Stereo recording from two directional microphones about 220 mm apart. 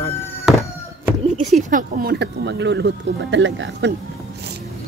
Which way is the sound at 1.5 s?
35° right (ahead or behind).